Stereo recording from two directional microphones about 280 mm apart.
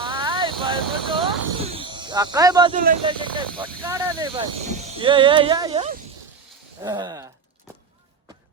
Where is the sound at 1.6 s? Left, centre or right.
Centre.